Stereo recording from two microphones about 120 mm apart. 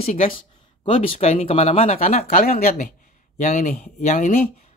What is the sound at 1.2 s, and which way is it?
Speech, 60° left (ahead or behind).